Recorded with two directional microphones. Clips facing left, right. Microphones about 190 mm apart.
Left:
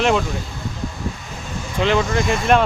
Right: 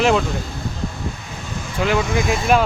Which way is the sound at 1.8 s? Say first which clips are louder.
Left 1 dB; 5° right (ahead or behind).